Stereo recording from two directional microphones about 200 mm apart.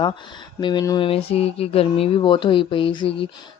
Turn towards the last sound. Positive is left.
turn(degrees=25)  # may be behind; listen again after turning